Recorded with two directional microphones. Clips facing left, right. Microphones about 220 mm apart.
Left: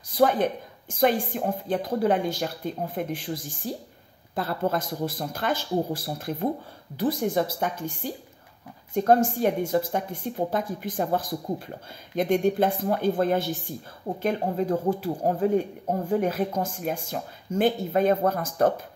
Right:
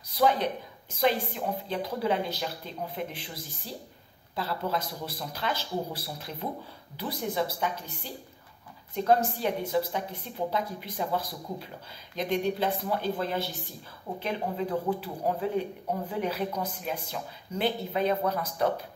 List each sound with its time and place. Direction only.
0.1 s speech: 50° left (ahead or behind)